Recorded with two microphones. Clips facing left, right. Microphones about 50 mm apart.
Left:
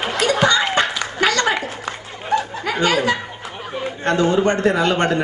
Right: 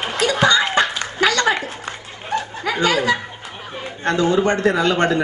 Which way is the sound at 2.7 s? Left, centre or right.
Left.